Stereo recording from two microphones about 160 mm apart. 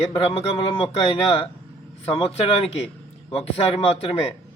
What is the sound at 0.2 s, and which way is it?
Speech, 35° left (ahead or behind).